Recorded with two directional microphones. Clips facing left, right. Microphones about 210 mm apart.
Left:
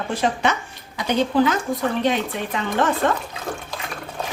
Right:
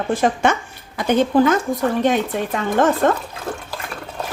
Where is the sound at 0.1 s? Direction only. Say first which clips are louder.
Right 4 dB; 50° right (ahead or behind).